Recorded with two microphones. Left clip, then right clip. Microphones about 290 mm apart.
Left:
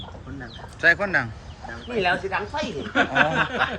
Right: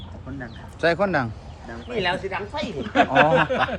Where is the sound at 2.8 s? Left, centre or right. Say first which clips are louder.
Right 4 dB; right.